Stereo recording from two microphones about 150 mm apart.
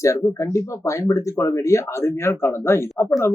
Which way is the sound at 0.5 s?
20° left (ahead or behind).